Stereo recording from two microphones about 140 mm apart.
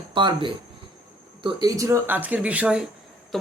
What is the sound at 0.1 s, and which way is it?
Speech, 35° right (ahead or behind).